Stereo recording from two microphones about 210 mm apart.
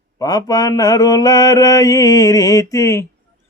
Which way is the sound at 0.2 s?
20° left (ahead or behind).